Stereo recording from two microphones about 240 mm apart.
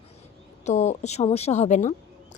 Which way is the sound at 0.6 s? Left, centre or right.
Left.